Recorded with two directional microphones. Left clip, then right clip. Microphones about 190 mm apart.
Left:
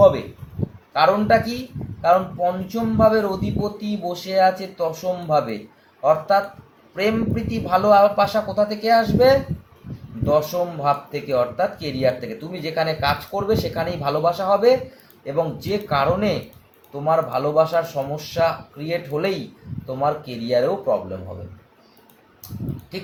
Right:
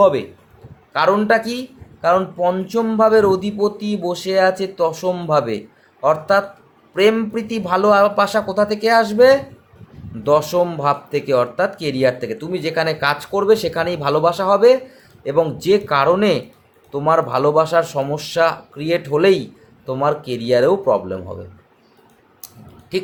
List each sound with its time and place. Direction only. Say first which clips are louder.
0.0 s a man's voice: right 1 dB; 50° right (ahead or behind)